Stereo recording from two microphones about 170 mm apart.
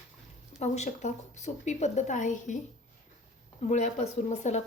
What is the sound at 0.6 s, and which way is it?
A woman's voice, 45° left (ahead or behind).